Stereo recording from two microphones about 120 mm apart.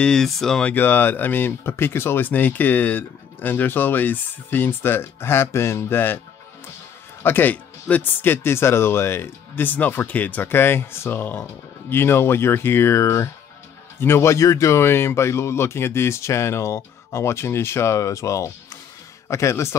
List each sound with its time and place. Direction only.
0.0 s speech: 5° left (ahead or behind)
7.2 s speech: 15° left (ahead or behind)